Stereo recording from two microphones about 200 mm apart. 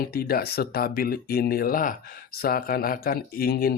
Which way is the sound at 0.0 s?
50° left (ahead or behind).